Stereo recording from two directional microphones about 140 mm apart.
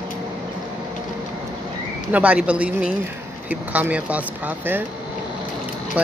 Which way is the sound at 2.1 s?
10° right (ahead or behind).